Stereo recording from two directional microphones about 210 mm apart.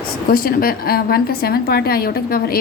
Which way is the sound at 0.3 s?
45° left (ahead or behind).